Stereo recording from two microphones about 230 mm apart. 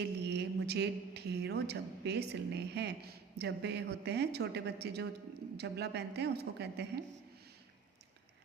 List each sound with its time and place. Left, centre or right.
0.0 s a woman's voice: right